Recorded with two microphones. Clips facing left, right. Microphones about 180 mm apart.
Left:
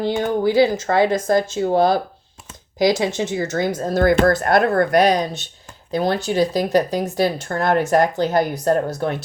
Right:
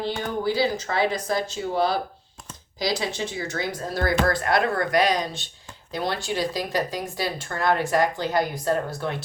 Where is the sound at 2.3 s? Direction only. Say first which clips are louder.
Even; 5° left (ahead or behind).